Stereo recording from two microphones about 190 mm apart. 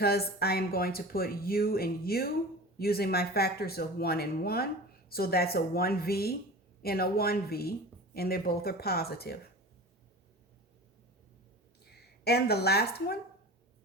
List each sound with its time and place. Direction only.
0.0 s speech: 55° left (ahead or behind)
11.9 s speech: 60° left (ahead or behind)